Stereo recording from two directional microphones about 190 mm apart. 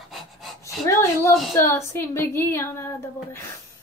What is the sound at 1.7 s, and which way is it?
A woman's voice, 15° left (ahead or behind).